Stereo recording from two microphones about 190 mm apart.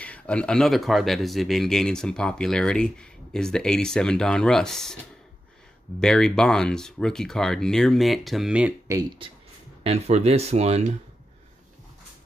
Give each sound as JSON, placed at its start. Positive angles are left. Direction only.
{"t": 0.0, "sound": "speech", "side_deg": 5}
{"t": 5.9, "sound": "speech", "side_deg": 5}
{"t": 8.8, "sound": "speech", "side_deg": -20}
{"t": 9.8, "sound": "speech", "side_deg": -35}